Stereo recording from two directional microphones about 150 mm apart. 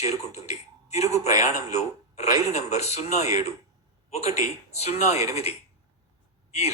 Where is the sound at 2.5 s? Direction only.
50° left (ahead or behind).